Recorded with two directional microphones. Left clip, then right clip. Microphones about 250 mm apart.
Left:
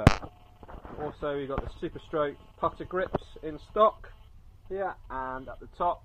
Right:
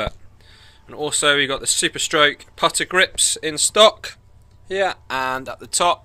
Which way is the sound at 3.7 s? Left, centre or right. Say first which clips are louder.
Right 10 dB; right.